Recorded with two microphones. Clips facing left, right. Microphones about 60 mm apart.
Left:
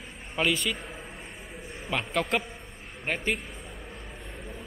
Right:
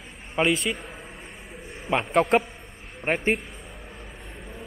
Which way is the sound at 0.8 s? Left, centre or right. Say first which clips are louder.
Right 1 dB; centre.